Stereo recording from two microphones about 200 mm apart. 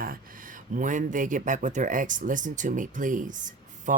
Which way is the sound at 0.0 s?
45° right (ahead or behind).